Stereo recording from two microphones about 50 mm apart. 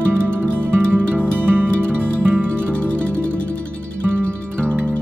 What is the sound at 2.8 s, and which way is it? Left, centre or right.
Music, left.